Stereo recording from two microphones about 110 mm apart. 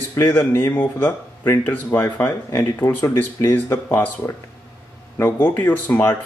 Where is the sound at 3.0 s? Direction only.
30° left (ahead or behind).